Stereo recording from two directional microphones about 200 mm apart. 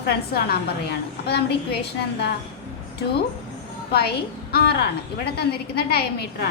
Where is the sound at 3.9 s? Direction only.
55° left (ahead or behind).